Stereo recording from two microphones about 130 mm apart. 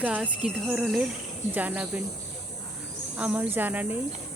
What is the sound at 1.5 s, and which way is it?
Speech, 10° right (ahead or behind).